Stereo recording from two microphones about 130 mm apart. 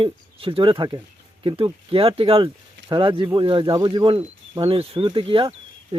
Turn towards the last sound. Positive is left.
turn(degrees=-45)  # may be behind; listen again after turning